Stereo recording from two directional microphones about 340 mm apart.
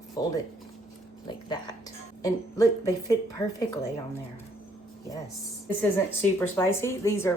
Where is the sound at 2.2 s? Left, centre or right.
Centre.